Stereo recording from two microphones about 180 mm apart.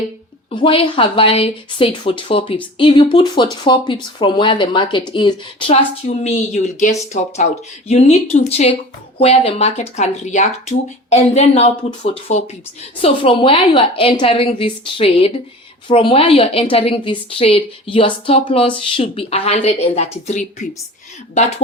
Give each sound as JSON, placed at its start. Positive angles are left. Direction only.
{"t": 0.5, "sound": "a woman's voice", "side_deg": 30}